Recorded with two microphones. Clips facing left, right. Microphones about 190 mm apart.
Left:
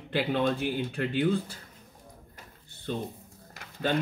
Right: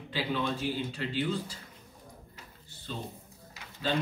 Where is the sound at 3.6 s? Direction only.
55° left (ahead or behind).